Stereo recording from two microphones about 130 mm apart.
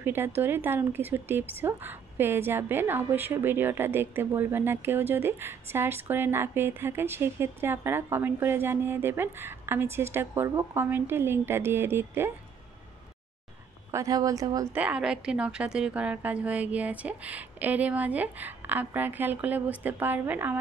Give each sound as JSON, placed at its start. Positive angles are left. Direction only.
{"t": 0.0, "sound": "speech", "side_deg": -15}
{"t": 13.9, "sound": "speech", "side_deg": -25}
{"t": 14.7, "sound": "speech", "side_deg": -10}